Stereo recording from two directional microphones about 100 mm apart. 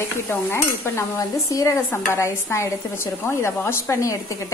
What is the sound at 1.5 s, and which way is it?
Speech, 35° left (ahead or behind).